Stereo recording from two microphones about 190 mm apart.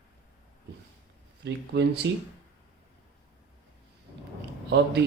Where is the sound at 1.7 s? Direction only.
65° right (ahead or behind).